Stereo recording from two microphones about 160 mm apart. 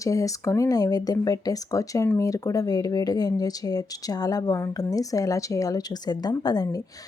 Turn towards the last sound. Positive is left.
turn(degrees=25)  # may be behind; listen again after turning